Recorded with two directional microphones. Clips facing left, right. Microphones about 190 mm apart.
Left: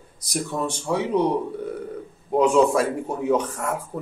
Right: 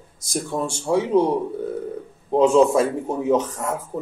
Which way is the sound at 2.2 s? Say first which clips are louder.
Right 2 dB; 25° right (ahead or behind).